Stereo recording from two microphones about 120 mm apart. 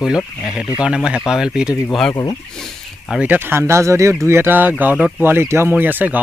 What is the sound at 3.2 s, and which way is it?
Speech, 15° right (ahead or behind).